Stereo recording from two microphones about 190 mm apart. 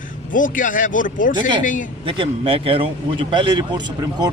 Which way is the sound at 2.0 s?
30° right (ahead or behind).